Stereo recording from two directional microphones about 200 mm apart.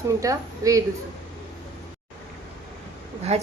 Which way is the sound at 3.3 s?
30° right (ahead or behind).